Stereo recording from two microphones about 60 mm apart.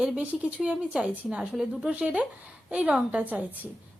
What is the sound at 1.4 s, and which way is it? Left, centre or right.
Speech, centre.